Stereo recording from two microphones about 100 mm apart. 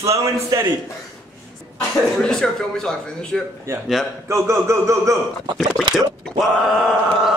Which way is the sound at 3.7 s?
25° right (ahead or behind).